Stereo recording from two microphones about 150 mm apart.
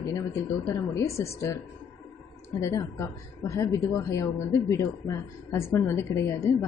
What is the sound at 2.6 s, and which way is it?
Speech, 20° left (ahead or behind).